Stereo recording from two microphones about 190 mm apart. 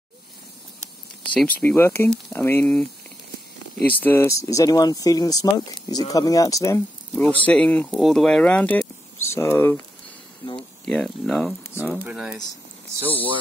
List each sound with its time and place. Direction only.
1.3 s speech: 5° left (ahead or behind)
10.9 s speech: 5° left (ahead or behind)
11.8 s speech: 10° right (ahead or behind)